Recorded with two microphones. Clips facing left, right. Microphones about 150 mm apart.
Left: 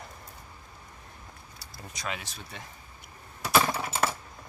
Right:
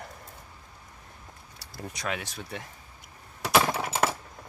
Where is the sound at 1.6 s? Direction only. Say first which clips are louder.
Right 3 dB; 60° right (ahead or behind).